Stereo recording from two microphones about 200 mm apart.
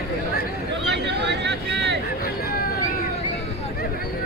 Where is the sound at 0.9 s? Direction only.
60° right (ahead or behind).